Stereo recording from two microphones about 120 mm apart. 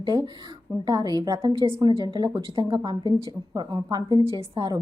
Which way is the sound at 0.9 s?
35° right (ahead or behind).